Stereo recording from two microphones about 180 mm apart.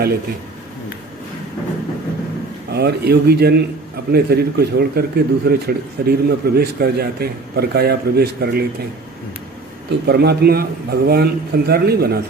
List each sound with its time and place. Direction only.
2.7 s a man's voice: 60° right (ahead or behind)
9.8 s a man's voice: 65° right (ahead or behind)